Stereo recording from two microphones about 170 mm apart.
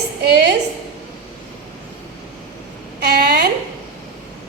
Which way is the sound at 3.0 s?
70° right (ahead or behind).